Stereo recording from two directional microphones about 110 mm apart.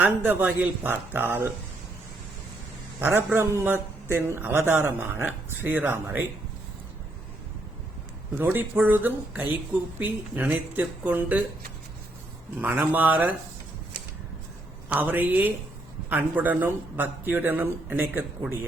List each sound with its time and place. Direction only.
0.0 s a man's voice: 20° right (ahead or behind)
3.2 s a man's voice: 20° right (ahead or behind)
8.4 s a man's voice: 15° right (ahead or behind)
12.5 s a man's voice: 15° right (ahead or behind)
14.8 s a man's voice: 15° right (ahead or behind)